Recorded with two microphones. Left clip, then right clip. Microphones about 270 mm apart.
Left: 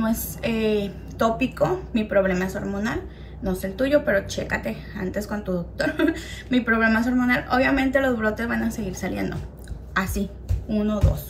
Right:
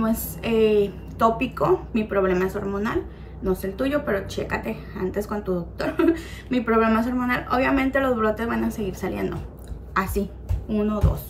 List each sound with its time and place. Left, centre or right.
0.0 s a woman's voice: centre